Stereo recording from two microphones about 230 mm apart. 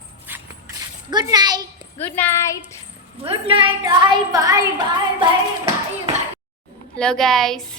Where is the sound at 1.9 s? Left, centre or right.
Centre.